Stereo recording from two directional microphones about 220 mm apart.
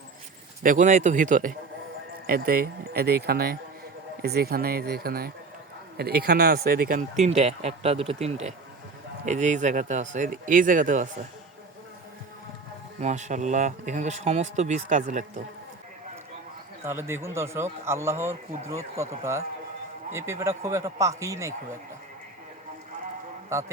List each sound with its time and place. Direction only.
0.6 s speech: 35° right (ahead or behind)
13.0 s speech: 30° right (ahead or behind)
16.8 s a man's voice: 10° right (ahead or behind)
23.5 s a man's voice: 10° right (ahead or behind)